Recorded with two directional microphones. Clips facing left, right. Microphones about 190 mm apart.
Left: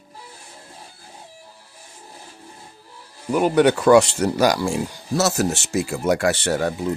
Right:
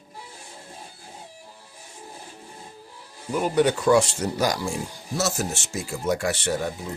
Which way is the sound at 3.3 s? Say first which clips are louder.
Left 5 dB; 70° left (ahead or behind).